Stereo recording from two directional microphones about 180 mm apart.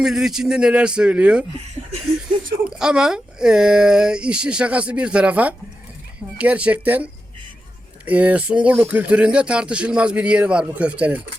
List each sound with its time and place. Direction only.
0.0 s speech: 5° right (ahead or behind)
2.6 s speech: 5° right (ahead or behind)